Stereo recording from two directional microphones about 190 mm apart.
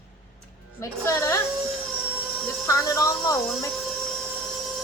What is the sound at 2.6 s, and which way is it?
Speech, 15° left (ahead or behind).